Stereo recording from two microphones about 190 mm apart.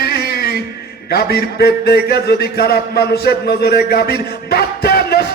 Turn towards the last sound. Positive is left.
turn(degrees=55)  # may be behind; listen again after turning